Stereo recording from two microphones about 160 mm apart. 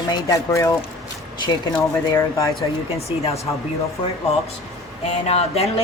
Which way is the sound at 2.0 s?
20° left (ahead or behind).